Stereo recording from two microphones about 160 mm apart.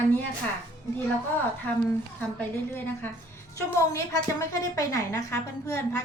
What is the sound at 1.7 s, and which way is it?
Speech, 10° left (ahead or behind).